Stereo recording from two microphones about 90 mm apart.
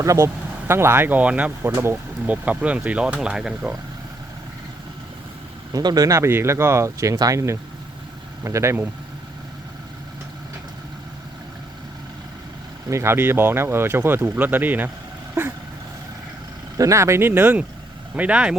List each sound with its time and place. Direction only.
0.0 s speech: 35° right (ahead or behind); by 1.5 s 15° right (ahead or behind)
1.6 s speech: 25° right (ahead or behind); by 3.8 s 10° right (ahead or behind)
5.7 s speech: 45° right (ahead or behind)
12.9 s speech: 30° right (ahead or behind)
16.7 s speech: 35° right (ahead or behind); by 18.5 s 15° right (ahead or behind)